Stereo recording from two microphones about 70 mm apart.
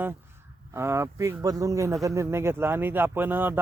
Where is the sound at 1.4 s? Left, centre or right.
Right.